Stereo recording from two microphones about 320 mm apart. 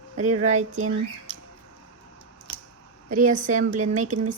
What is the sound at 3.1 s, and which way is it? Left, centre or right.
Speech, right.